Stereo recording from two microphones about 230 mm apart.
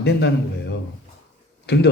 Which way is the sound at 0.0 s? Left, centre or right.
Left.